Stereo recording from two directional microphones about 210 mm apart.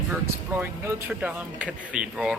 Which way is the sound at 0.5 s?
10° right (ahead or behind).